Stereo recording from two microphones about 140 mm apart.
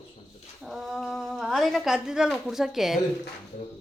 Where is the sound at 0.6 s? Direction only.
Centre (ahead or behind).